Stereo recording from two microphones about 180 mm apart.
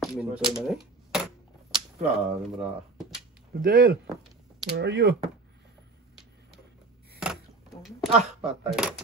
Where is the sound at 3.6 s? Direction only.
55° right (ahead or behind).